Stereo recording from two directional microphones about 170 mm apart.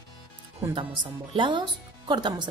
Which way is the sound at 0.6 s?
30° right (ahead or behind).